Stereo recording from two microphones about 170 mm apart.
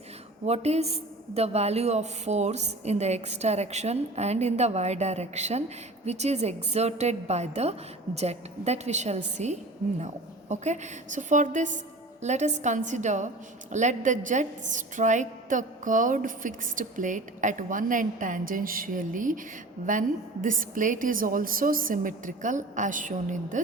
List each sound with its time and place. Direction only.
0.4 s a woman's voice: 40° right (ahead or behind)